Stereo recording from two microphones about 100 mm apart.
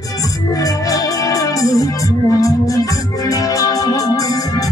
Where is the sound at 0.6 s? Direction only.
35° left (ahead or behind).